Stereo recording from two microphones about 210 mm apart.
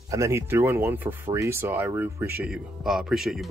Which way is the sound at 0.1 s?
15° right (ahead or behind).